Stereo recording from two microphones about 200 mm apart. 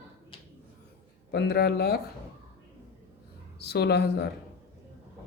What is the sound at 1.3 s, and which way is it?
Speech, 55° left (ahead or behind).